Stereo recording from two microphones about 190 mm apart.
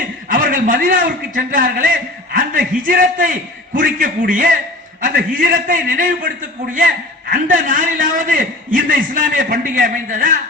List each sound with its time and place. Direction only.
0.3 s a man's voice: 45° right (ahead or behind)
7.3 s a man's voice: 45° right (ahead or behind)